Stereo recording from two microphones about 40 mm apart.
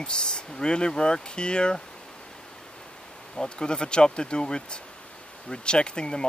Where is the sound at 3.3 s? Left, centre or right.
Left.